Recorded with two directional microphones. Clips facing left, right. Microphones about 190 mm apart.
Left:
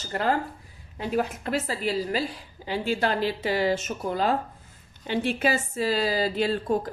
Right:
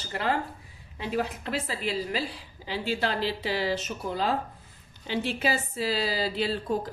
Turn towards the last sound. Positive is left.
turn(degrees=50)  # may be behind; listen again after turning